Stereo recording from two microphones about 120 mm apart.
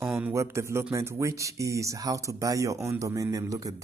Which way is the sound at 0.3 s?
25° right (ahead or behind).